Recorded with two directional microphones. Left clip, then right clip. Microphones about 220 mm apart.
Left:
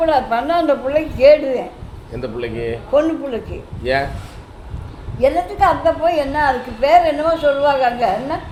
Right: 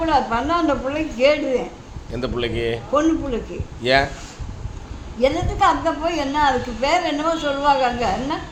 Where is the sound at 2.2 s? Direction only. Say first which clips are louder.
Even; 25° right (ahead or behind).